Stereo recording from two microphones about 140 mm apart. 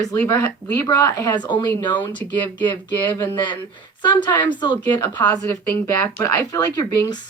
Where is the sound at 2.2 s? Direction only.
40° right (ahead or behind).